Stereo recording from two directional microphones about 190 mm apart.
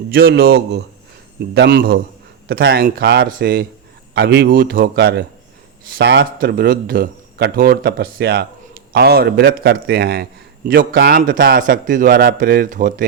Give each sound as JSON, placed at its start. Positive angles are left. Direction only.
{"t": 0.1, "sound": "a man's voice", "side_deg": -55}
{"t": 4.1, "sound": "a man's voice", "side_deg": -60}
{"t": 6.4, "sound": "a man's voice", "side_deg": -55}